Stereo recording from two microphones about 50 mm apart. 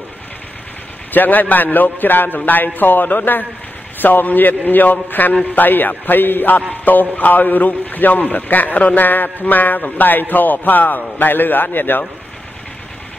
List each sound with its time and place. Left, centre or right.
1.1 s a man's voice: left